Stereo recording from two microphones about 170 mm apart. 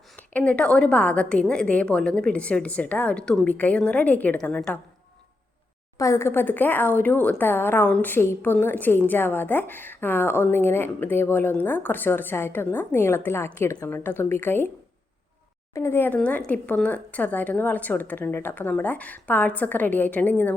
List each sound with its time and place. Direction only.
0.2 s a woman's voice: 10° left (ahead or behind)
6.0 s a woman's voice: 15° left (ahead or behind)
15.7 s a woman's voice: 15° left (ahead or behind)